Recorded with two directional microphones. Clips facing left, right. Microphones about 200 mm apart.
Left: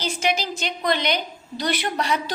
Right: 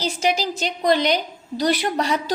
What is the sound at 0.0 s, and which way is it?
A woman's voice, 40° right (ahead or behind).